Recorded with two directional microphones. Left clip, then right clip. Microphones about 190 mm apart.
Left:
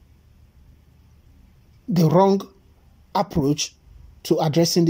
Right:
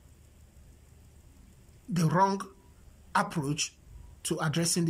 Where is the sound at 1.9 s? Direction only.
25° left (ahead or behind).